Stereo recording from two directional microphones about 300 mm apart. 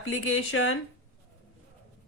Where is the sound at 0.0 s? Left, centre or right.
Left.